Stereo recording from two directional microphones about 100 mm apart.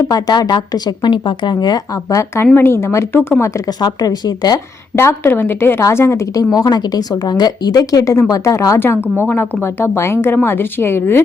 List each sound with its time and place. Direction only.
0.0 s a woman's voice: 40° left (ahead or behind); by 3.5 s 25° left (ahead or behind)
3.8 s a woman's voice: 40° left (ahead or behind)
4.9 s a woman's voice: 25° left (ahead or behind)